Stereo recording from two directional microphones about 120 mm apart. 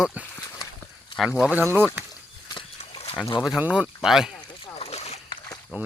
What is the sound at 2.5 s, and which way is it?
Horse, 45° left (ahead or behind).